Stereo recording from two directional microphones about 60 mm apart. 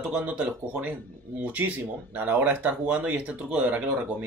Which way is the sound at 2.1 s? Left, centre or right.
Right.